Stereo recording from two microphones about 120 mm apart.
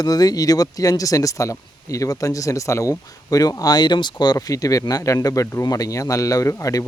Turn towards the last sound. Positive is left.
turn(degrees=30)  # may be behind; listen again after turning